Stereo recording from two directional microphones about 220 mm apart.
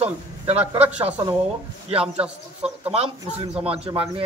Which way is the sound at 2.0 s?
5° right (ahead or behind).